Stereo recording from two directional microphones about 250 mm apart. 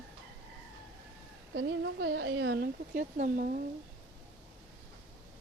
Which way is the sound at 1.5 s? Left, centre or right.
Right.